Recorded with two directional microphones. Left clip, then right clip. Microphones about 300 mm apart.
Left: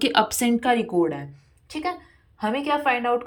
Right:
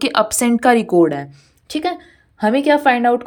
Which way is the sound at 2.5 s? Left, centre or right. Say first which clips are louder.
Right 9 dB; right.